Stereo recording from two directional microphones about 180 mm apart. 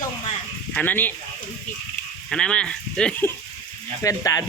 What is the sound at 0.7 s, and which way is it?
Speech, 10° left (ahead or behind).